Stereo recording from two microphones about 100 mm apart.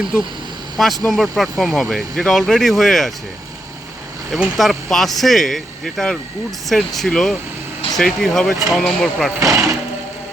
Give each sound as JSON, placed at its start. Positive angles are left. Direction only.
{"t": 1.0, "sound": "speech", "side_deg": 0}
{"t": 4.3, "sound": "speech", "side_deg": 0}
{"t": 9.4, "sound": "speech", "side_deg": -30}